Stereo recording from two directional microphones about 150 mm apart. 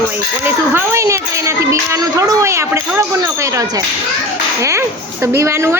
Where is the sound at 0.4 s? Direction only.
15° right (ahead or behind).